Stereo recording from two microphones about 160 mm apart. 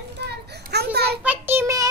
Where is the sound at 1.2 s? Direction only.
10° right (ahead or behind).